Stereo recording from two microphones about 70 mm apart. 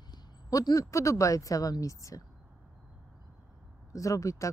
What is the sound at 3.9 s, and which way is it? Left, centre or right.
Speech, left.